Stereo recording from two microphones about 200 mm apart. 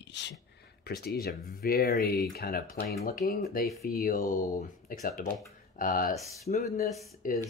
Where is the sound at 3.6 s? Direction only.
Centre (ahead or behind).